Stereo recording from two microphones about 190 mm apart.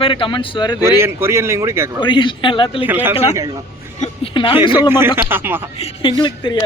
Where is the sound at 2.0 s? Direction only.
25° left (ahead or behind).